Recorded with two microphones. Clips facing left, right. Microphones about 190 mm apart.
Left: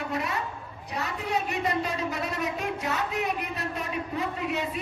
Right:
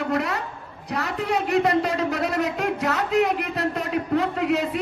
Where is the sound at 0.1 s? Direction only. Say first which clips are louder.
Right 6 dB; 80° right.